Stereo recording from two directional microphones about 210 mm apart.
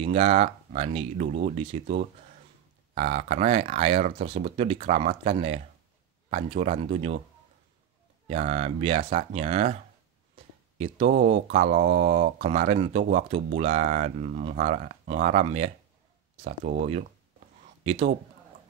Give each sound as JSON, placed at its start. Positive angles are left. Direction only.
{"t": 0.0, "sound": "speech", "side_deg": -30}
{"t": 8.3, "sound": "speech", "side_deg": -30}
{"t": 10.8, "sound": "speech", "side_deg": -35}